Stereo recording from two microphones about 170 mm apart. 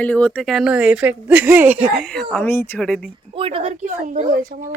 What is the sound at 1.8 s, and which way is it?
Speech, centre (ahead or behind).